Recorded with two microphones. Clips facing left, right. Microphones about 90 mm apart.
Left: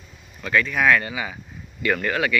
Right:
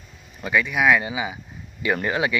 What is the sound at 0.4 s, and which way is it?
Speech, 10° right (ahead or behind).